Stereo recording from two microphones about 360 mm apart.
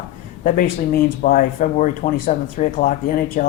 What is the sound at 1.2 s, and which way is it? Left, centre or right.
Speech, left.